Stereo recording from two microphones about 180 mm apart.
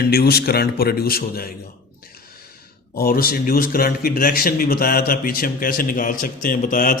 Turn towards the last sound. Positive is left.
turn(degrees=50)  # may be behind; listen again after turning